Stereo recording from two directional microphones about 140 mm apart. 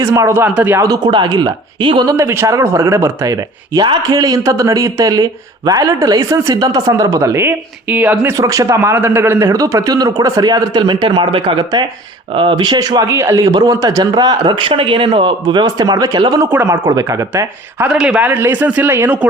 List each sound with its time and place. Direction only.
0.0 s speech: 20° right (ahead or behind)
0.9 s a man's voice: 30° right (ahead or behind)
2.1 s a man's voice: 20° right (ahead or behind)
16.4 s speech: 15° right (ahead or behind)
16.6 s speech: 25° right (ahead or behind)
17.8 s speech: 5° right (ahead or behind)